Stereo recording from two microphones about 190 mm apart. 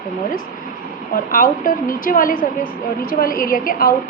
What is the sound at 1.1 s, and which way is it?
A woman's voice, 45° left (ahead or behind).